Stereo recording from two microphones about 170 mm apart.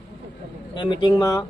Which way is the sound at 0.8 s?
30° left (ahead or behind).